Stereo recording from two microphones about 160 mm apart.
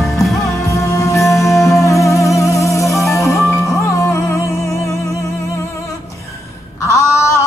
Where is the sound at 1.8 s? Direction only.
20° left (ahead or behind).